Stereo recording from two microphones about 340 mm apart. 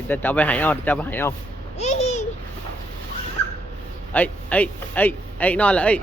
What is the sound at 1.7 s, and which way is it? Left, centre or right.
Babbling, centre.